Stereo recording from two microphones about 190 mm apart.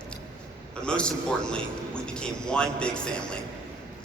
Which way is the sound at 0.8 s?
5° left (ahead or behind).